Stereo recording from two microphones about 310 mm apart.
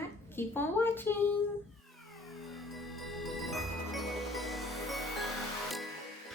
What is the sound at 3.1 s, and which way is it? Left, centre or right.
Music, centre.